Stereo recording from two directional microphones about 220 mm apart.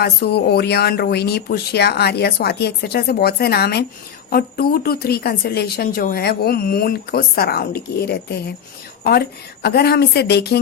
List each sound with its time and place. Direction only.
0.0 s speech: 45° left (ahead or behind)
9.6 s speech: 45° left (ahead or behind)